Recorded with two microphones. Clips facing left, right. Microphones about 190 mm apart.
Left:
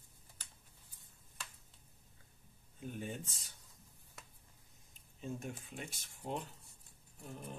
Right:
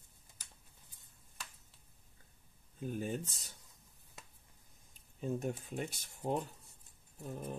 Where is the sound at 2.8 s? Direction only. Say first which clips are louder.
Right 5 dB; 40° right (ahead or behind).